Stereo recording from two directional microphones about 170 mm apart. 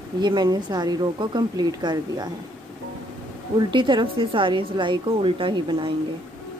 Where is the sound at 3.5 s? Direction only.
30° right (ahead or behind).